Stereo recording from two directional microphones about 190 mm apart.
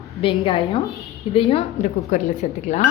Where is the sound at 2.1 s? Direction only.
40° left (ahead or behind).